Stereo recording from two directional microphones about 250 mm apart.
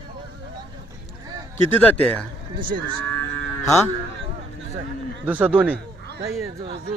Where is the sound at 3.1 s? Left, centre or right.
Centre.